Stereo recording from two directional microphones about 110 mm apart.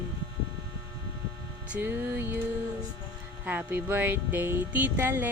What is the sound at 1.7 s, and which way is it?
Music, 20° right (ahead or behind).